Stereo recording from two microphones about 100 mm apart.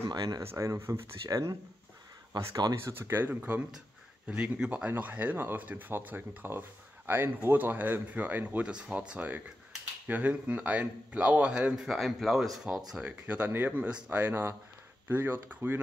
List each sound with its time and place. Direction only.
0.1 s speech: 45° right (ahead or behind)
0.4 s speech: 30° right (ahead or behind)
2.7 s speech: 20° right (ahead or behind); by 12.8 s centre (ahead or behind)
12.9 s speech: 15° right (ahead or behind)